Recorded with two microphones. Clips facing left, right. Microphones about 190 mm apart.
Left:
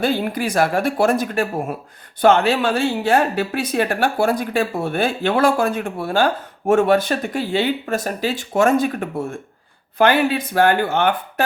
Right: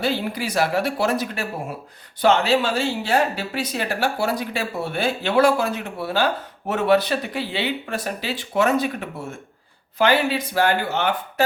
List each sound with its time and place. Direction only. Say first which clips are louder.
0.0 s speech: left 4 dB; 50° left (ahead or behind)